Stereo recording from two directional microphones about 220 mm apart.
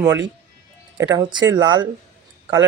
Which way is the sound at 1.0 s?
20° right (ahead or behind).